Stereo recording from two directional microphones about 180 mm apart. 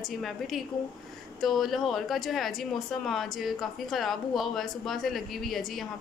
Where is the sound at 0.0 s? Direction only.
Centre (ahead or behind).